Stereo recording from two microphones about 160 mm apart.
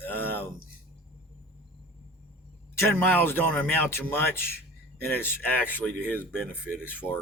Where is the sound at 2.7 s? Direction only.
15° left (ahead or behind).